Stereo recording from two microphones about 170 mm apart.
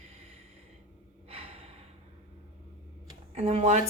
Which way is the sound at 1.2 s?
35° right (ahead or behind).